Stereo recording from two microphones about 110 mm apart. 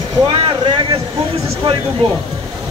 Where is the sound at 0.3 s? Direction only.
55° right (ahead or behind).